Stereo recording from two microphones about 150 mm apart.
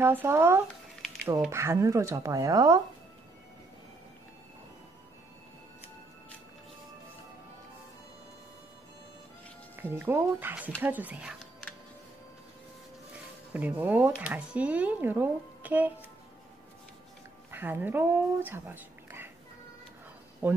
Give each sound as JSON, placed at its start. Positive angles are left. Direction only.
{"t": 0.0, "sound": "speech", "side_deg": -15}
{"t": 9.8, "sound": "speech", "side_deg": -15}
{"t": 13.5, "sound": "speech", "side_deg": -10}
{"t": 17.5, "sound": "speech", "side_deg": -15}
{"t": 20.4, "sound": "speech", "side_deg": -15}